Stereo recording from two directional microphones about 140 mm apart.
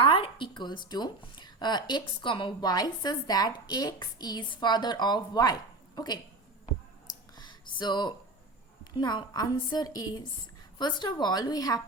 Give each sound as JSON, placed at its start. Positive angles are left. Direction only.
{"t": 0.0, "sound": "a woman's voice", "side_deg": 40}
{"t": 7.3, "sound": "a sound", "side_deg": 30}
{"t": 9.0, "sound": "a woman's voice", "side_deg": 30}